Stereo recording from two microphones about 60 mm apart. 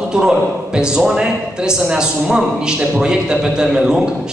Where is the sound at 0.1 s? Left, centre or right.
Centre.